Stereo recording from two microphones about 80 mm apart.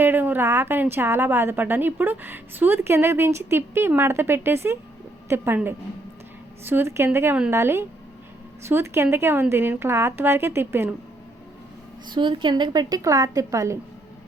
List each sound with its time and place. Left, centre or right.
0.0 s a woman's voice: right
6.7 s speech: right
12.1 s speech: right
13.0 s a woman's voice: right